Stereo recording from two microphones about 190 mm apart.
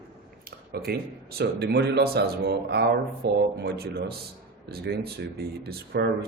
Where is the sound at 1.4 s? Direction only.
55° right (ahead or behind).